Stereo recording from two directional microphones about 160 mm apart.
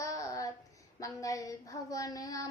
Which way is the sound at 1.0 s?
20° left (ahead or behind).